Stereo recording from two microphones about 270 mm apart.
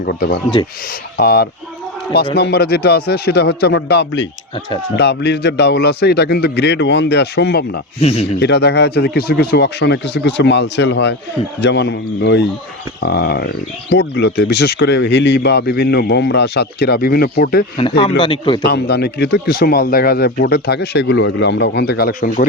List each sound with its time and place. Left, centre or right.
0.0 s speech: left
7.9 s speech: left
8.4 s speech: left
17.7 s speech: centre
18.6 s speech: left